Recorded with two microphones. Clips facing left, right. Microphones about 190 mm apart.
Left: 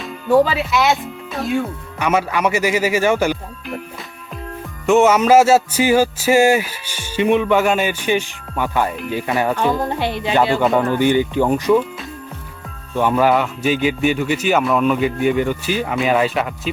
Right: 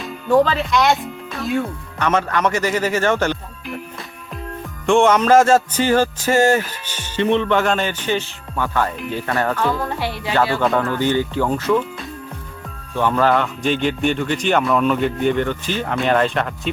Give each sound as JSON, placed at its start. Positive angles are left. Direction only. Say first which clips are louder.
{"t": 0.0, "sound": "speech", "louder": "left 1 dB", "side_deg": 5}
{"t": 4.9, "sound": "speech", "louder": "left 1 dB", "side_deg": 5}
{"t": 10.6, "sound": "speech", "louder": "left 2 dB", "side_deg": 5}
{"t": 10.8, "sound": "speech", "louder": "left 3 dB", "side_deg": 15}
{"t": 12.9, "sound": "speech", "louder": "left 2 dB", "side_deg": 10}